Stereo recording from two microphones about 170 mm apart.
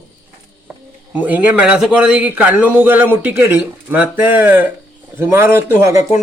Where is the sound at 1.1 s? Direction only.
10° right (ahead or behind).